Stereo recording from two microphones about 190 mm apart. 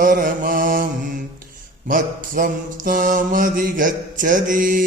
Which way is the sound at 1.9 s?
45° right (ahead or behind).